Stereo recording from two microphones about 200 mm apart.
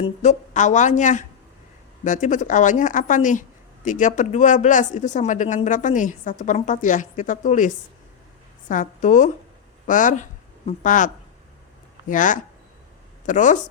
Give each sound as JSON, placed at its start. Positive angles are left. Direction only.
{"t": 0.0, "sound": "speech", "side_deg": 35}
{"t": 8.7, "sound": "speech", "side_deg": 40}